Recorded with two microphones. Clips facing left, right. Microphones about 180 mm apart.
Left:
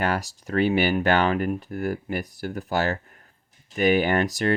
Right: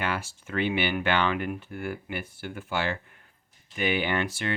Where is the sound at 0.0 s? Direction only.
40° left (ahead or behind).